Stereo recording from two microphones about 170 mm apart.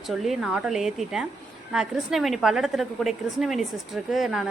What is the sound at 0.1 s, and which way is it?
A woman's voice, centre (ahead or behind).